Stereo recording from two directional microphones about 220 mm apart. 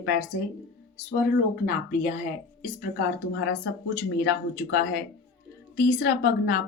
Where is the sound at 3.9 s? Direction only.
50° left (ahead or behind).